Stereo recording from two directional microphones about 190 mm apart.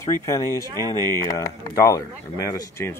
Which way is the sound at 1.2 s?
15° left (ahead or behind).